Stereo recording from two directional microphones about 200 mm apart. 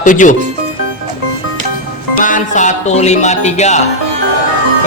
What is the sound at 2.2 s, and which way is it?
Speech, 40° left (ahead or behind).